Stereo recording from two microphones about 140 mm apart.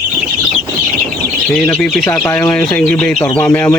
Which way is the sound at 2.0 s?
15° left (ahead or behind).